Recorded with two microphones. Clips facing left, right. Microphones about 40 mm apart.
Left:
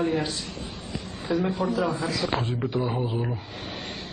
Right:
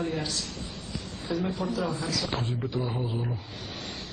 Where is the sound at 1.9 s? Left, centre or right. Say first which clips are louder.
Left 4 dB; left.